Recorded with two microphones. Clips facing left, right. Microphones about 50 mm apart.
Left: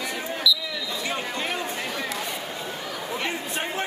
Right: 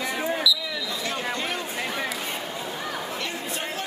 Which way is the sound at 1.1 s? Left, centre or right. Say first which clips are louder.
Even; centre.